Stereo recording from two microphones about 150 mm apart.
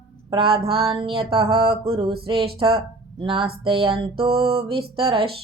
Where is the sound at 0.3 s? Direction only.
35° right (ahead or behind).